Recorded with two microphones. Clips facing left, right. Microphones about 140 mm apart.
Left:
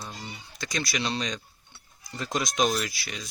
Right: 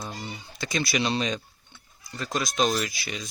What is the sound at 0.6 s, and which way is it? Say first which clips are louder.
Speech: right 4 dB; centre (ahead or behind).